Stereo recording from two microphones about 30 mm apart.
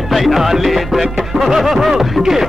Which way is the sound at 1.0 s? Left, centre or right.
Centre.